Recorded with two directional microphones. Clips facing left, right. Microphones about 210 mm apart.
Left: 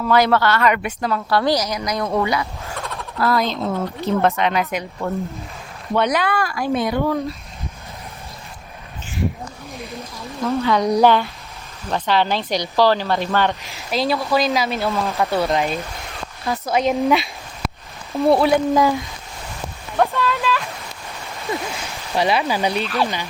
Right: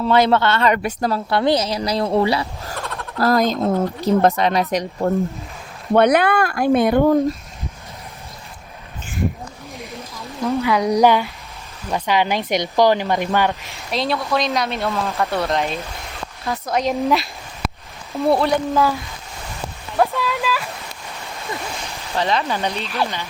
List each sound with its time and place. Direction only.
0.0 s a woman's voice: 25° right (ahead or behind)
1.3 s a woman's voice: 25° right (ahead or behind)
2.7 s a sound: centre (ahead or behind)
3.2 s speech: 40° right (ahead or behind)
5.9 s speech: 55° right (ahead or behind)
9.7 s a sound: 15° right (ahead or behind)
10.6 s speech: 10° right (ahead or behind)
13.5 s speech: centre (ahead or behind)
20.0 s a sound: 10° right (ahead or behind)
22.1 s speech: 10° left (ahead or behind)